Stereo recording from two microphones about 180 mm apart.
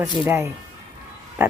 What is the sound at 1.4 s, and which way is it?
Pig, 10° right (ahead or behind).